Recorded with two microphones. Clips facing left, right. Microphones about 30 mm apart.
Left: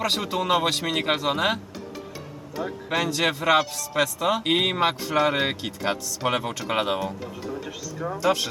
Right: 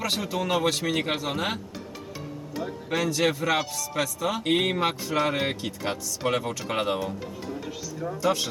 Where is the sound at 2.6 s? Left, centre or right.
Centre.